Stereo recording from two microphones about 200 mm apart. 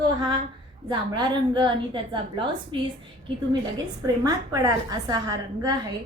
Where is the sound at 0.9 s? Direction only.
20° right (ahead or behind).